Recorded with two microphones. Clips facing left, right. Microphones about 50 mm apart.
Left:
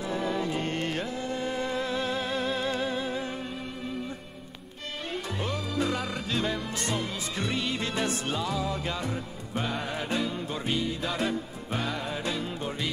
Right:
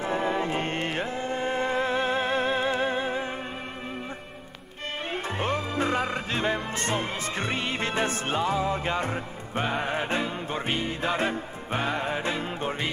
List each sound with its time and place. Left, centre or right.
0.0 s music: right
5.1 s music: right